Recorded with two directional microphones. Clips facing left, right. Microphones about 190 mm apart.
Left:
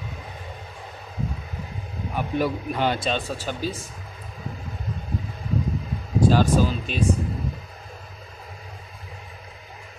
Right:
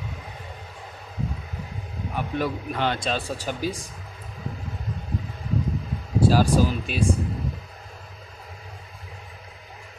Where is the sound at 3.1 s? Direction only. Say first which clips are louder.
Left 1 dB; 10° right (ahead or behind).